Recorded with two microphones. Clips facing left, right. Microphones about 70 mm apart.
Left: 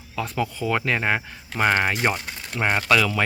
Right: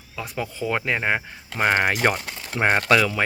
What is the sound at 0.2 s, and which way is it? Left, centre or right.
Speech, centre.